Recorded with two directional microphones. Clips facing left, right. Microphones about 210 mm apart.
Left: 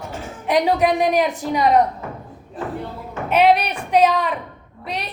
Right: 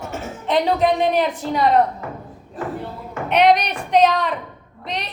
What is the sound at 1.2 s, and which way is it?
Speech, 10° left (ahead or behind).